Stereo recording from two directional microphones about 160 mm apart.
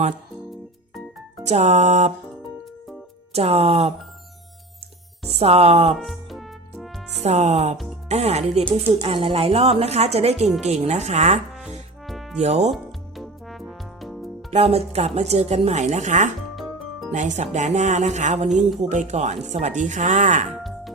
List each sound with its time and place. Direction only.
1.5 s a woman's voice: 45° right (ahead or behind)
3.3 s a woman's voice: 40° right (ahead or behind)
5.2 s speech: 40° right (ahead or behind)
5.9 s music: centre (ahead or behind)
7.2 s a woman's voice: 45° right (ahead or behind)
12.0 s music: centre (ahead or behind)
12.4 s a woman's voice: 45° right (ahead or behind)
12.7 s music: centre (ahead or behind)
14.5 s a woman's voice: 40° right (ahead or behind)